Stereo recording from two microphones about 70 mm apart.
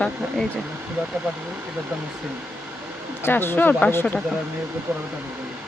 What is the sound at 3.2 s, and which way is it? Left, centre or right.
Speech, left.